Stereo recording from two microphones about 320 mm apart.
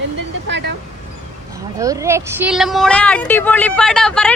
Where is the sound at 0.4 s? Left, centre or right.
Right.